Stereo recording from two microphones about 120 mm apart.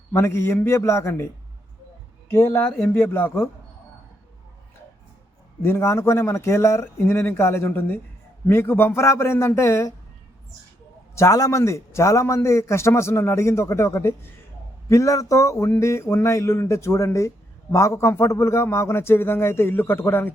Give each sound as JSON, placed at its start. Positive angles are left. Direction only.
{"t": 0.1, "sound": "speech", "side_deg": 20}
{"t": 2.3, "sound": "speech", "side_deg": 20}
{"t": 2.6, "sound": "speech", "side_deg": 10}
{"t": 2.9, "sound": "speech", "side_deg": 20}
{"t": 5.6, "sound": "speech", "side_deg": 20}
{"t": 11.1, "sound": "speech", "side_deg": 25}